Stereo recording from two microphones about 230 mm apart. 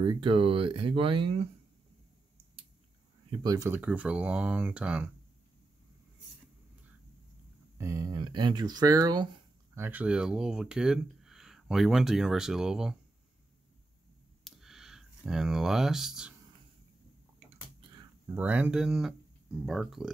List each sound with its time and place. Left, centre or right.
0.0 s speech: right
3.3 s speech: centre
7.7 s speech: centre
14.4 s a sound: centre
18.3 s speech: centre